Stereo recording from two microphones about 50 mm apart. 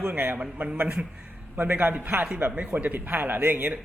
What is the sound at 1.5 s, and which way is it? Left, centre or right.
A man's voice, right.